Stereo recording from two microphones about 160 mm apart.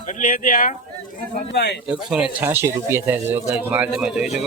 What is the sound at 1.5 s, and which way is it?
Speech, 90° left.